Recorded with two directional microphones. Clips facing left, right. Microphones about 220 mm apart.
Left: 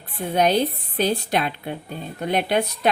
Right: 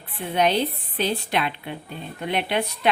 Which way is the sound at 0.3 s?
40° left (ahead or behind).